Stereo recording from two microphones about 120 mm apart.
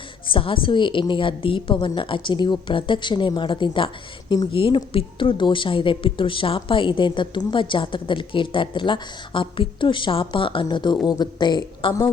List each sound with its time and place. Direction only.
0.3 s a woman's voice: 45° left (ahead or behind)